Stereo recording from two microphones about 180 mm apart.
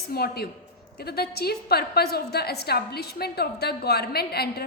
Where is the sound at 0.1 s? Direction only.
60° left (ahead or behind).